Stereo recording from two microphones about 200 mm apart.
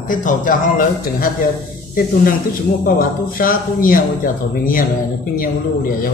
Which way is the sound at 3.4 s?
45° left (ahead or behind).